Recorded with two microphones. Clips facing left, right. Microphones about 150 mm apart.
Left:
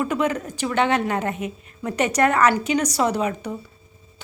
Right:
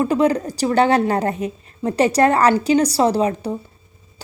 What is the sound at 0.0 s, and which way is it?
A woman's voice, 35° right (ahead or behind).